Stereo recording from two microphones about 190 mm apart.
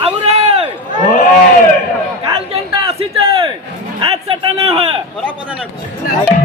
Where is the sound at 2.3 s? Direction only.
25° right (ahead or behind).